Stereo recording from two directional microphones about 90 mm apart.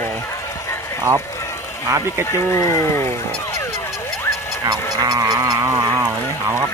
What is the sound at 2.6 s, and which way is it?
Speech, 35° left (ahead or behind).